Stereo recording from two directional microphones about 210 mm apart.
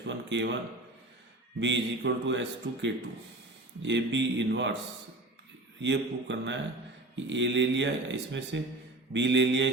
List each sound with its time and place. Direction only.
0.1 s a sound: 60° right (ahead or behind)
1.5 s speech: 60° right (ahead or behind)
5.8 s speech: 60° right (ahead or behind)